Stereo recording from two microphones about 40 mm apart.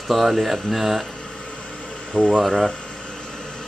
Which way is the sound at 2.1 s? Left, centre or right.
Left.